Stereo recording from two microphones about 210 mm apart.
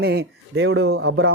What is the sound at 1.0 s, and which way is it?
Speech, 75° right (ahead or behind).